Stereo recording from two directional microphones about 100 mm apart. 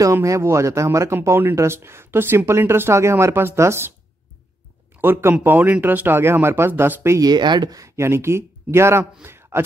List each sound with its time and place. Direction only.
0.0 s speech: 30° right (ahead or behind)
5.0 s speech: 20° right (ahead or behind)
7.2 s speech: 45° right (ahead or behind)
7.8 s speech: 30° right (ahead or behind)
9.2 s a sound: 25° right (ahead or behind)